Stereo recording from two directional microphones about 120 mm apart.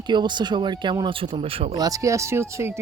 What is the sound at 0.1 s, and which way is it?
Speech, 40° right (ahead or behind).